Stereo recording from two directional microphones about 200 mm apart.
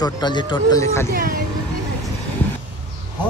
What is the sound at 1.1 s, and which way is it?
Speech, 45° right (ahead or behind).